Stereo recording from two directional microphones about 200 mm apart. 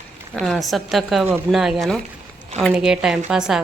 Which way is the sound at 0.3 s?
Centre (ahead or behind).